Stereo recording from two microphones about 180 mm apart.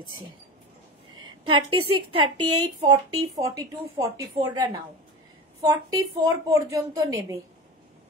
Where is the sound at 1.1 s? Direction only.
25° right (ahead or behind).